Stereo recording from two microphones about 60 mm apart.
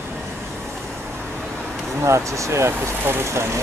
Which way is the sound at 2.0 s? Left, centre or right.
Right.